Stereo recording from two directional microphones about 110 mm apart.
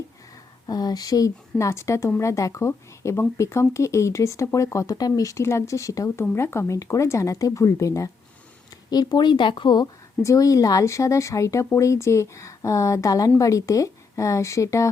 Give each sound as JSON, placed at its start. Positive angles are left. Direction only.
{"t": 0.7, "sound": "speech", "side_deg": 35}